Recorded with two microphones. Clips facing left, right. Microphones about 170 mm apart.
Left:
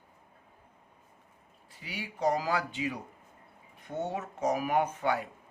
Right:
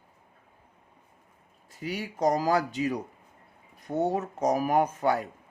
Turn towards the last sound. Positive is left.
turn(degrees=-40)  # may be behind; listen again after turning